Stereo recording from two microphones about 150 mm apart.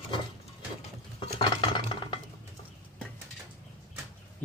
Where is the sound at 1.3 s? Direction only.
30° left (ahead or behind).